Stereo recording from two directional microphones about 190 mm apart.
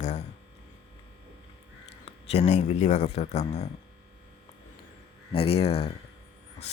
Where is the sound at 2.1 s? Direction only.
30° left (ahead or behind).